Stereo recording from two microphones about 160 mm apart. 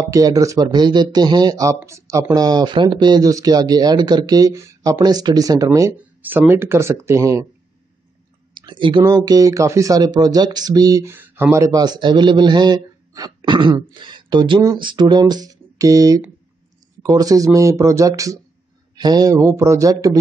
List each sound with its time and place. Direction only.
0.0 s speech: 20° right (ahead or behind)
8.5 s speech: 30° right (ahead or behind)